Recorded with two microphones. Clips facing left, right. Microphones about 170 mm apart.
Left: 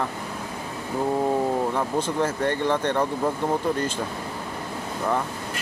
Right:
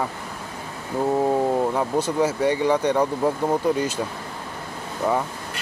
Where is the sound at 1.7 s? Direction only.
10° right (ahead or behind).